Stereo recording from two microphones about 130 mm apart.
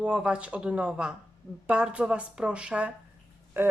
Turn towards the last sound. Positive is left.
turn(degrees=-20)  # may be behind; listen again after turning